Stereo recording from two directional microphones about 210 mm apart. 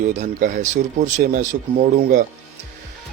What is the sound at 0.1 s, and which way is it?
Speech, 35° right (ahead or behind).